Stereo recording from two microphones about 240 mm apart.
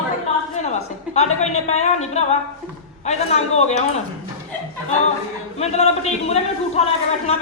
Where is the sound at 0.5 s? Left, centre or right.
Left.